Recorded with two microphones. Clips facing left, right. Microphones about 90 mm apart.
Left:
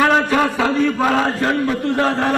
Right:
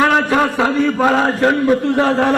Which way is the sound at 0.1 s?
5° right (ahead or behind).